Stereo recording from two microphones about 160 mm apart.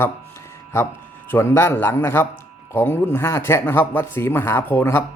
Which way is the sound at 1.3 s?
15° left (ahead or behind).